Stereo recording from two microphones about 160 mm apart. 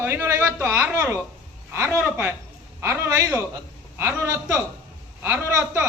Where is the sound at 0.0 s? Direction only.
15° right (ahead or behind).